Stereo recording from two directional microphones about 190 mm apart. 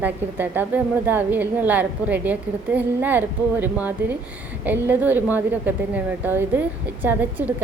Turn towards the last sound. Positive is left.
turn(degrees=-10)  # may be behind; listen again after turning